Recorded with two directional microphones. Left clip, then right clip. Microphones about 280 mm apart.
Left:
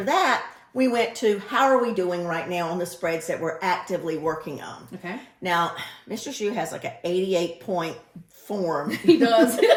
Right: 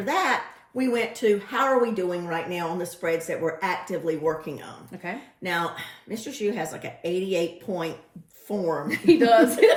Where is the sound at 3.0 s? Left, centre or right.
Centre.